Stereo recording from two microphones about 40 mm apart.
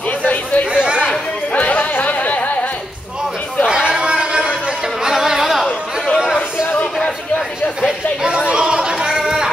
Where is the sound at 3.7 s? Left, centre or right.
Right.